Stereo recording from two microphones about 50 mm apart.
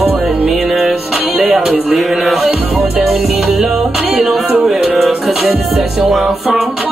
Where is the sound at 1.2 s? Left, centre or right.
Right.